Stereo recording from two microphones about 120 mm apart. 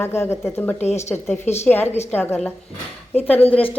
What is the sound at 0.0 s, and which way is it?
Speech, 20° left (ahead or behind).